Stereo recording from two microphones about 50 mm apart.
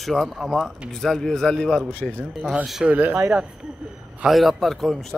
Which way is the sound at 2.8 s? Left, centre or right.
Right.